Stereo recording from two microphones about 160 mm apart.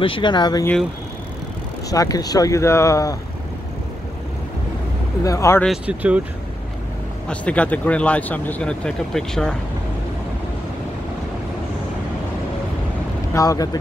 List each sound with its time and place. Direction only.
0.0 s speech: 30° left (ahead or behind)
1.9 s speech: 20° left (ahead or behind)
5.2 s speech: 20° left (ahead or behind)
5.9 s speech: 10° right (ahead or behind)
7.2 s speech: 10° left (ahead or behind)
13.3 s speech: 20° left (ahead or behind)